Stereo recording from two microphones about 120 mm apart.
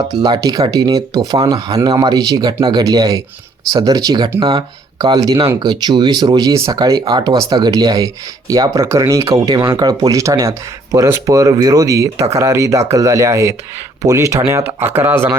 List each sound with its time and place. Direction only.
0.2 s speech: 30° right (ahead or behind)